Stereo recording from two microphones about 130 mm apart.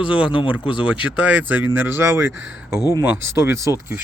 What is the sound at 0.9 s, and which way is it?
Speech, 10° right (ahead or behind).